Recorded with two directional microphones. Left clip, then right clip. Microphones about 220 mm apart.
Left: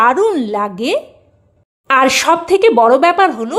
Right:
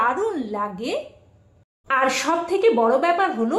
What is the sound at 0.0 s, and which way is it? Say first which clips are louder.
A woman's voice: left 10 dB; 50° left (ahead or behind).